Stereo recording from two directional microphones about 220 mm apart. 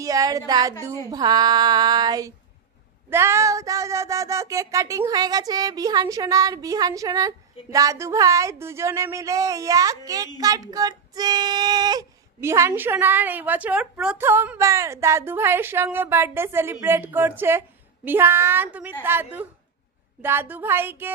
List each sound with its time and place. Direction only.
0.0 s speech: 15° right (ahead or behind)